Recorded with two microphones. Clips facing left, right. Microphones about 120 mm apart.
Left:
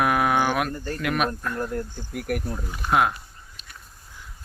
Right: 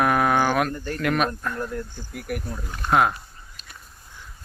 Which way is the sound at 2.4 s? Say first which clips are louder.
Right 1 dB; 5° left (ahead or behind).